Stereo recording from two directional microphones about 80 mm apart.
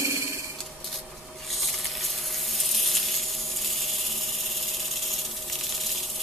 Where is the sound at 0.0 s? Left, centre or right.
Right.